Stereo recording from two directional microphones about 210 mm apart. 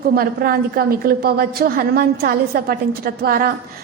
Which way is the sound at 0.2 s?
45° right (ahead or behind).